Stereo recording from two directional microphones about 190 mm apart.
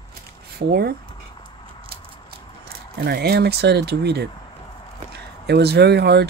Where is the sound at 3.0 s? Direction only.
55° right (ahead or behind).